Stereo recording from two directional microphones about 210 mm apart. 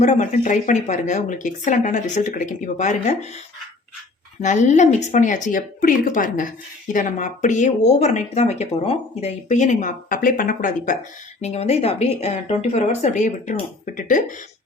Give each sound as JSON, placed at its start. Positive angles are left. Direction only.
{"t": 0.0, "sound": "speech", "side_deg": 35}
{"t": 4.4, "sound": "speech", "side_deg": 35}